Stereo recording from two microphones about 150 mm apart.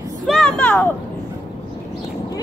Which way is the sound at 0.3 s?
5° left (ahead or behind).